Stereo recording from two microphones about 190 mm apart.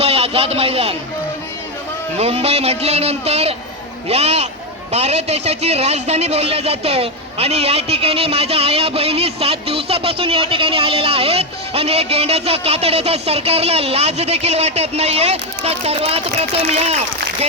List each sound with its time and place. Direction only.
0.0 s a man's voice: 35° right (ahead or behind)
2.1 s a man's voice: 35° right (ahead or behind)